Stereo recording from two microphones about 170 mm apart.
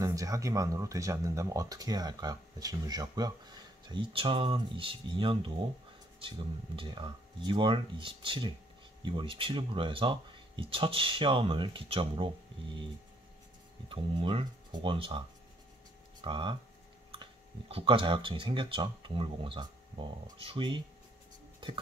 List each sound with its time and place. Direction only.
0.0 s speech: 20° right (ahead or behind)
13.8 s speech: 30° right (ahead or behind)
16.3 s speech: 25° right (ahead or behind)